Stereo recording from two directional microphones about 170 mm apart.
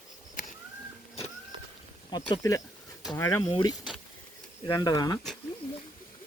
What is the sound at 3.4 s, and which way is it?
Speech, 30° left (ahead or behind).